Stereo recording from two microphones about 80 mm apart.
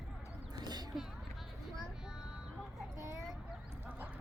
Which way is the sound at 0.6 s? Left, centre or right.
Right.